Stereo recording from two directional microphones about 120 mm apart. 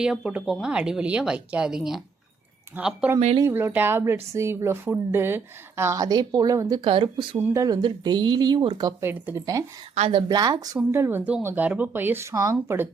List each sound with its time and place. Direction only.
0.0 s a woman's voice: 5° right (ahead or behind); by 7.3 s 45° right (ahead or behind)
7.3 s speech: 20° right (ahead or behind); by 9.0 s 35° right (ahead or behind)
9.0 s a woman's voice: 20° right (ahead or behind)
10.2 s speech: 35° right (ahead or behind)
10.9 s a woman's voice: 20° right (ahead or behind)